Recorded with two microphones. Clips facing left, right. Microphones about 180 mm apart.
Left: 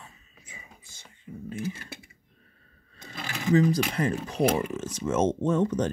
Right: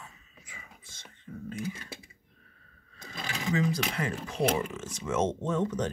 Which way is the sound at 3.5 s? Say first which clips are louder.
Left 7 dB; 35° left (ahead or behind).